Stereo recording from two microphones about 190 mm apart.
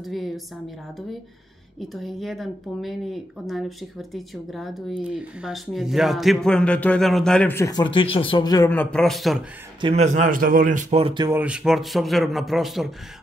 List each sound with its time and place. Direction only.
0.0 s speech: centre (ahead or behind)
1.8 s speech: centre (ahead or behind); by 8.6 s 20° left (ahead or behind)
8.6 s speech: 5° left (ahead or behind)
9.8 s speech: 30° right (ahead or behind)
11.2 s speech: 10° right (ahead or behind)